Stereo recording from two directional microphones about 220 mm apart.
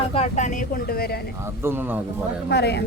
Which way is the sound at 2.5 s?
50° left (ahead or behind).